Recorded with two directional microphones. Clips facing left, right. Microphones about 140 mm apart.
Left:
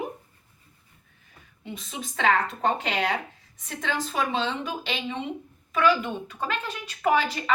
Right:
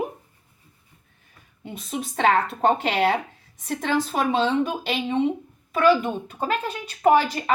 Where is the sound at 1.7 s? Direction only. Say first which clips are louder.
Right 6 dB; 45° right (ahead or behind).